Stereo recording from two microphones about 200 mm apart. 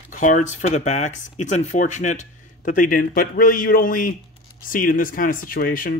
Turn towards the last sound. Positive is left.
turn(degrees=45)  # may be behind; listen again after turning